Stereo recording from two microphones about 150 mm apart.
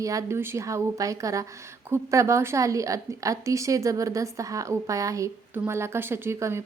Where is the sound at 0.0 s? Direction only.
20° right (ahead or behind).